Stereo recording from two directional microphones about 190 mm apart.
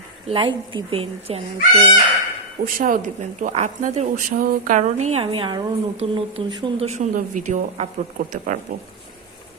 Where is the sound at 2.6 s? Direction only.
45° right (ahead or behind).